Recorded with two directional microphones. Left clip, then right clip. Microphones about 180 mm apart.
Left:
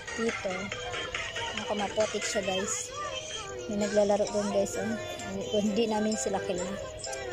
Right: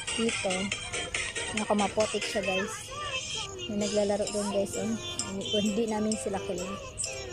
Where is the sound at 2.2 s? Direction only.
25° right (ahead or behind).